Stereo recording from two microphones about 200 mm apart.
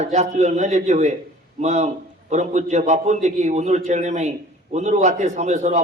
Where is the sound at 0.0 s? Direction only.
35° right (ahead or behind).